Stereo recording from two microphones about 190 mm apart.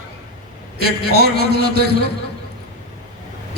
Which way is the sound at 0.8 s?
55° right (ahead or behind).